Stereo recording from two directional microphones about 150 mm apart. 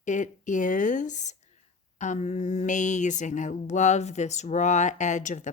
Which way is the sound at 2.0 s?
55° left (ahead or behind).